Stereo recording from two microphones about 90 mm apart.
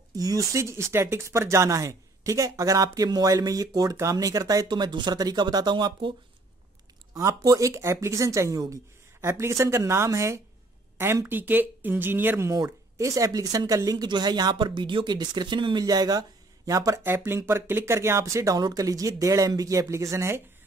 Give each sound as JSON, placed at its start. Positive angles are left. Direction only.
{"t": 0.1, "sound": "speech", "side_deg": -40}
{"t": 4.6, "sound": "speech", "side_deg": -55}
{"t": 7.2, "sound": "speech", "side_deg": -40}
{"t": 12.4, "sound": "speech", "side_deg": -40}
{"t": 15.8, "sound": "speech", "side_deg": -45}
{"t": 17.0, "sound": "speech", "side_deg": -25}